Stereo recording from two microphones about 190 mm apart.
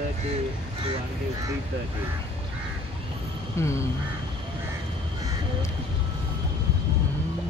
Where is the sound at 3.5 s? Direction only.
15° left (ahead or behind).